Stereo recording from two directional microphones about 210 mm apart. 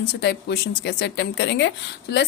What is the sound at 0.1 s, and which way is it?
Speech, 50° left (ahead or behind).